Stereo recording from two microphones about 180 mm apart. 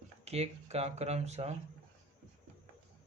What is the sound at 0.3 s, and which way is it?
Speech, 35° right (ahead or behind).